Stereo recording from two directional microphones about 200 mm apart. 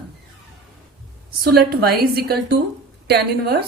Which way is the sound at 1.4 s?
50° right (ahead or behind).